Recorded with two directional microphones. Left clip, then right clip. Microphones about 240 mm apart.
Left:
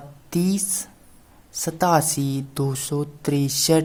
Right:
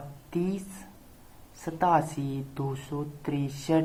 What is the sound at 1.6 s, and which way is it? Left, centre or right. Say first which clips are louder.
Speech: left 5 dB; left.